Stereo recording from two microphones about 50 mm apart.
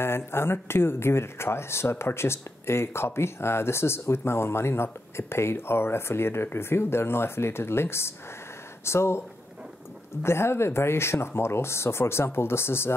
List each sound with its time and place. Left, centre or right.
0.0 s speech: left
10.2 s speech: left